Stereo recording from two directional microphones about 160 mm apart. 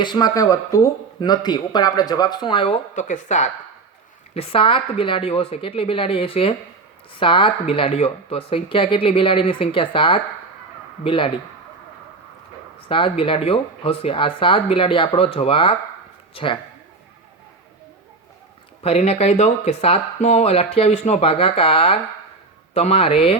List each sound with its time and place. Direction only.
0.0 s speech: 25° left (ahead or behind)
2.9 s speech: 50° left (ahead or behind)
4.4 s speech: 35° left (ahead or behind)
12.9 s speech: 35° left (ahead or behind)
18.8 s speech: 40° left (ahead or behind)